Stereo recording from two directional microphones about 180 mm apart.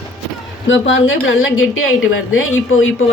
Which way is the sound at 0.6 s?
90° left.